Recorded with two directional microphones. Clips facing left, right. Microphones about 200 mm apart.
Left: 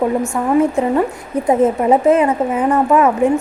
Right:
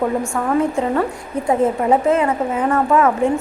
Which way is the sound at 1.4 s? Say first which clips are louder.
Left 3 dB; 20° left (ahead or behind).